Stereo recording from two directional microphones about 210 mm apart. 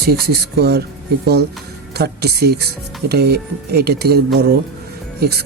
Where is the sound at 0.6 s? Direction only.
50° right (ahead or behind).